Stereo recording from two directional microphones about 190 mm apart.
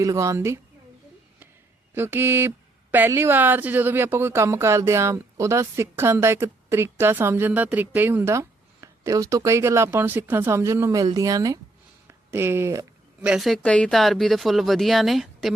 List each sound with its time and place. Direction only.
0.0 s speech: 15° right (ahead or behind)
2.0 s speech: 10° right (ahead or behind)
13.2 s speech: 5° right (ahead or behind)